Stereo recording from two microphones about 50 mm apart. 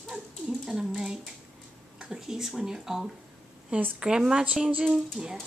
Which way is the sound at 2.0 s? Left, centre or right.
Centre.